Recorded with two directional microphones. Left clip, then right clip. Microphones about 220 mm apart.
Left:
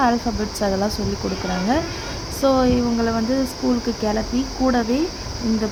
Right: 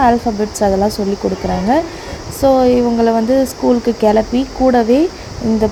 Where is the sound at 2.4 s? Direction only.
15° right (ahead or behind).